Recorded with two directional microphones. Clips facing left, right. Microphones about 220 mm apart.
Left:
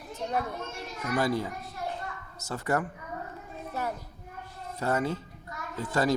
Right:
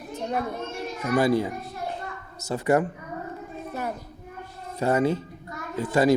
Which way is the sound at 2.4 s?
15° right (ahead or behind).